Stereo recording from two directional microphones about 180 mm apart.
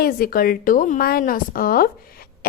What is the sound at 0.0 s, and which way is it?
A woman's voice, 55° left (ahead or behind).